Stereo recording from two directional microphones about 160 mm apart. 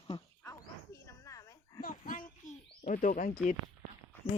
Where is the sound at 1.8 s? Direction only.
60° left (ahead or behind).